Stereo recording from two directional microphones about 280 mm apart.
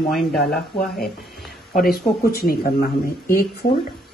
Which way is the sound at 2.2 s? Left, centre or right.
Left.